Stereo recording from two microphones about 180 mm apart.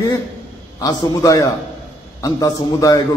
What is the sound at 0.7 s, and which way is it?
A man's voice, 20° left (ahead or behind).